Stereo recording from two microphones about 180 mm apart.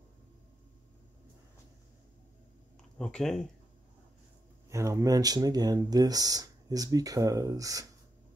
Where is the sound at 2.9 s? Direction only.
5° left (ahead or behind).